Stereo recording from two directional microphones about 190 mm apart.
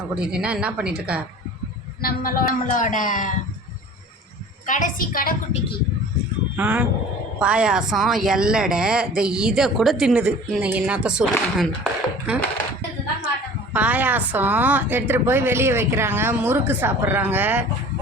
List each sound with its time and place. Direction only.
0.2 s a woman's voice: 5° right (ahead or behind)
2.0 s a man's voice: 50° left (ahead or behind)
4.6 s a man's voice: 40° left (ahead or behind)
6.6 s a woman's voice: 5° right (ahead or behind)
13.7 s a woman's voice: 10° right (ahead or behind)